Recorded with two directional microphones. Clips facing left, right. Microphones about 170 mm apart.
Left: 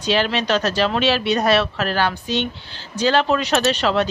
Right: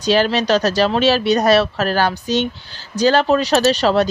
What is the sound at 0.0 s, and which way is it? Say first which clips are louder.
Speech: right 4 dB; 40° right (ahead or behind).